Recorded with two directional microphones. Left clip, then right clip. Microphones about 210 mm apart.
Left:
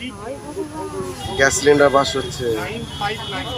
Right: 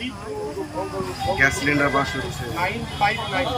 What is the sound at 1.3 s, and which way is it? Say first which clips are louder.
Speech: left 6 dB; 30° left (ahead or behind).